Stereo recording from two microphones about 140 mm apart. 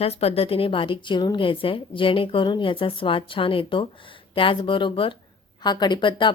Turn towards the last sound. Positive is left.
turn(degrees=35)  # may be behind; listen again after turning